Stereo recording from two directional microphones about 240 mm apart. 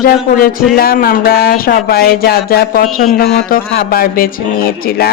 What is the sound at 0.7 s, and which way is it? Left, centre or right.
Speech, left.